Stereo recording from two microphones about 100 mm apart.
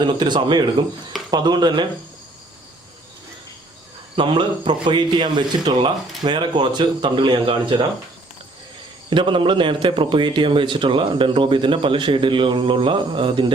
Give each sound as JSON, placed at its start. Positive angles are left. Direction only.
{"t": 0.0, "sound": "a man's voice", "side_deg": -50}
{"t": 4.1, "sound": "a man's voice", "side_deg": -60}
{"t": 9.0, "sound": "a man's voice", "side_deg": -55}